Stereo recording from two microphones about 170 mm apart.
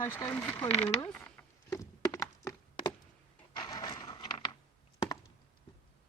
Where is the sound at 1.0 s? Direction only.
10° left (ahead or behind); by 4.5 s 25° left (ahead or behind).